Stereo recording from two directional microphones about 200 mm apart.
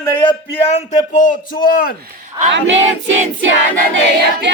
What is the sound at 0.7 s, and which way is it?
A man's voice, 35° left (ahead or behind).